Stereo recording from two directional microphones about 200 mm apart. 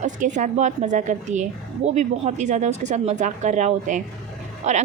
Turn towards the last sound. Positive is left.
turn(degrees=-35)  # may be behind; listen again after turning